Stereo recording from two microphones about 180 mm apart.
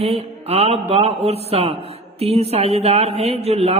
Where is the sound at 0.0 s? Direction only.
35° right (ahead or behind).